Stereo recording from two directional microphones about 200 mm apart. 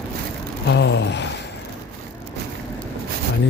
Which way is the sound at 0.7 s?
60° left (ahead or behind).